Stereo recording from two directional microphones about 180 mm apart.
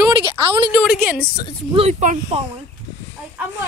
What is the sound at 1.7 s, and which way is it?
Speech, 35° right (ahead or behind).